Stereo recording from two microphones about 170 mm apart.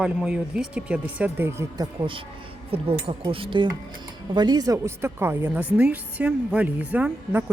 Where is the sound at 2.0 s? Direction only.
30° right (ahead or behind).